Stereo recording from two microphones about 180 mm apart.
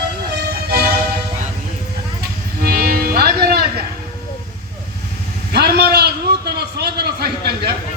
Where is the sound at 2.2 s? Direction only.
60° right (ahead or behind).